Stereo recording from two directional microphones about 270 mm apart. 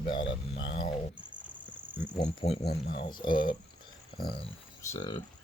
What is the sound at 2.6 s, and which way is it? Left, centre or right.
Speech, left.